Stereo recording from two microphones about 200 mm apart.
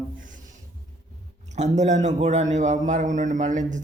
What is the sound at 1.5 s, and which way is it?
A man's voice, 35° right (ahead or behind).